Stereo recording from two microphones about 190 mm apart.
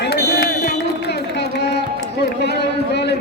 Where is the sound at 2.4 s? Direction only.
60° left (ahead or behind).